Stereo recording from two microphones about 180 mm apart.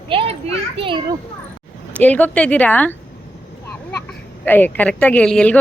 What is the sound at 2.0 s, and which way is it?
Speech, 10° left (ahead or behind).